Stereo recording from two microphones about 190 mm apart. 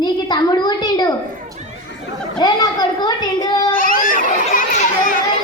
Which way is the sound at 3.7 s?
45° left (ahead or behind).